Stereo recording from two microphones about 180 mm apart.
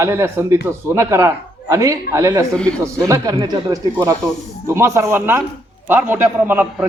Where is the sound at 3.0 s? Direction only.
20° right (ahead or behind).